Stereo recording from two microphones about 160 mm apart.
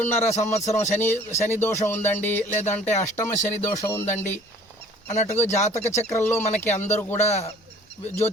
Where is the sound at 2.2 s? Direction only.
10° left (ahead or behind).